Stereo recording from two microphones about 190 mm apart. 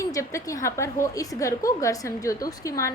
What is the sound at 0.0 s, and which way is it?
A woman's voice, 15° left (ahead or behind).